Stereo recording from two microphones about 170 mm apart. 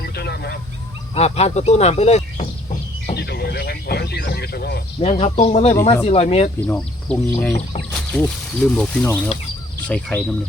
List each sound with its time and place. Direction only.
0.0 s goose: 70° left (ahead or behind)
1.1 s speech: 40° left (ahead or behind)
3.2 s a sound: 70° left (ahead or behind)
4.9 s speech: 35° left (ahead or behind)
6.6 s speech: 5° left (ahead or behind)